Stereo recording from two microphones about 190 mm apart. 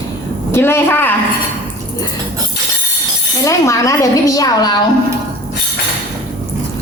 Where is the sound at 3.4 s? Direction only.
15° left (ahead or behind).